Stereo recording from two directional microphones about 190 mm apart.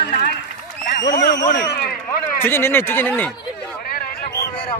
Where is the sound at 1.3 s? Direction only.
65° left (ahead or behind).